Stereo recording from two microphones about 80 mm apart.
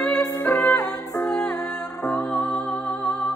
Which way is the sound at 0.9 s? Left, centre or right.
Left.